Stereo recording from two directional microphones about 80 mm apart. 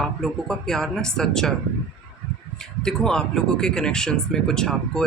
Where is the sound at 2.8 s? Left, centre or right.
Centre.